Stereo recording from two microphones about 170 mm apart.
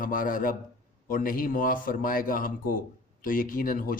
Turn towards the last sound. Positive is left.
turn(degrees=55)  # may be behind; listen again after turning